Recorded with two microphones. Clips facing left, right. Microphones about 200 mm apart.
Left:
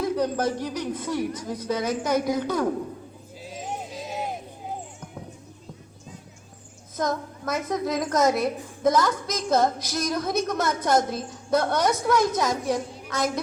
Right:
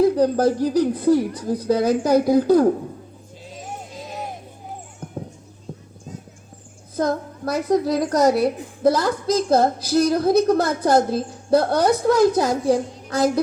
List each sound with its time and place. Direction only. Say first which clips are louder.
0.0 s a woman's voice: right 8 dB; 35° right (ahead or behind)
6.9 s a woman's voice: right 5 dB; 35° right (ahead or behind)